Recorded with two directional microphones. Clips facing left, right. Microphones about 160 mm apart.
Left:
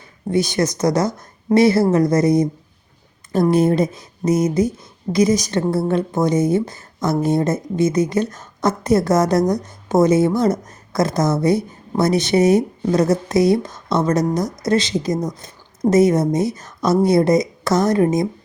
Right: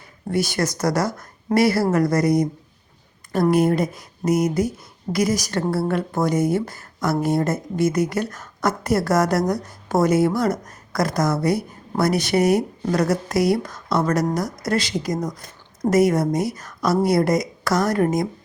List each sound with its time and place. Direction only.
0.3 s speech: 20° left (ahead or behind)
3.5 s speech: 25° left (ahead or behind)